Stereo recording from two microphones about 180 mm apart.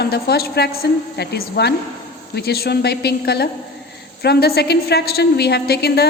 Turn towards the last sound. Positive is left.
turn(degrees=65)  # may be behind; listen again after turning